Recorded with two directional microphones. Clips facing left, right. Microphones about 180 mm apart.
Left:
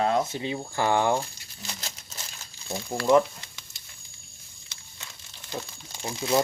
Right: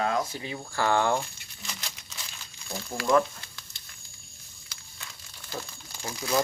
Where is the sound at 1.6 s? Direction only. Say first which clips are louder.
Left 2 dB; 40° left (ahead or behind).